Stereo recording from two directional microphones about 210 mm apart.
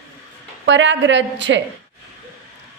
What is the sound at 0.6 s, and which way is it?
Speech, 60° right (ahead or behind).